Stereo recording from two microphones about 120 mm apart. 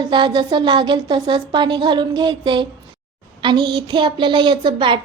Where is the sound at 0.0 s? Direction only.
40° right (ahead or behind).